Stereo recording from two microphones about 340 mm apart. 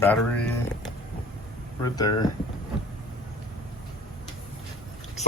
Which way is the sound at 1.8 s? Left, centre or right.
Centre.